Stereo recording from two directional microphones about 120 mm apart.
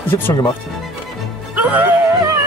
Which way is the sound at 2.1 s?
30° right (ahead or behind).